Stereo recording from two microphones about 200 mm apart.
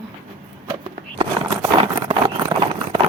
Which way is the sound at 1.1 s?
20° right (ahead or behind).